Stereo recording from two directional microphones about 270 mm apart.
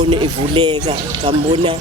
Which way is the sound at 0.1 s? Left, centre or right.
Centre.